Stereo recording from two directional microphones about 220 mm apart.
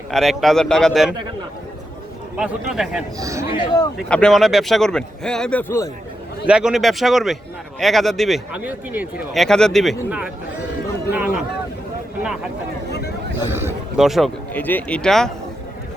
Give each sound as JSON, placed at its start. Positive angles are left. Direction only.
{"t": 0.1, "sound": "a man's voice", "side_deg": 0}
{"t": 2.3, "sound": "a man's voice", "side_deg": -5}
{"t": 3.2, "sound": "a man's voice", "side_deg": -15}
{"t": 3.5, "sound": "speech", "side_deg": 25}
{"t": 3.9, "sound": "a man's voice", "side_deg": 0}
{"t": 6.4, "sound": "a man's voice", "side_deg": -5}
{"t": 12.2, "sound": "speech", "side_deg": -5}
{"t": 13.5, "sound": "a man's voice", "side_deg": -10}